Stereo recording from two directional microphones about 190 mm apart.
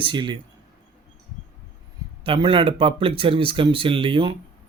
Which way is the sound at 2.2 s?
25° right (ahead or behind).